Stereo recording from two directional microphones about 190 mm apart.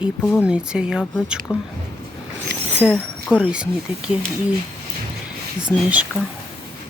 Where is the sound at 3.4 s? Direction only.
5° right (ahead or behind).